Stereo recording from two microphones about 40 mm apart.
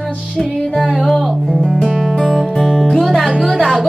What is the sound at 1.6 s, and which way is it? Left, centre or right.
Music, centre.